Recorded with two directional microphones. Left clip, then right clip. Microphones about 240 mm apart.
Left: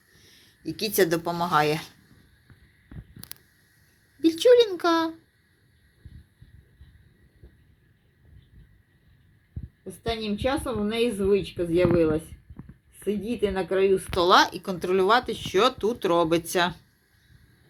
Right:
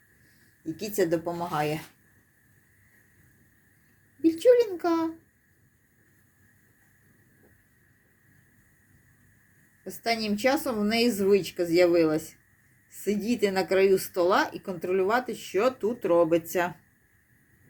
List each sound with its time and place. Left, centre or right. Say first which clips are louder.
0.6 s speech: left 4 dB; centre
4.2 s speech: left 3 dB; centre
9.8 s speech: right 2 dB; centre
10.5 s a woman's voice: right 1 dB; centre
14.2 s speech: left 5 dB; centre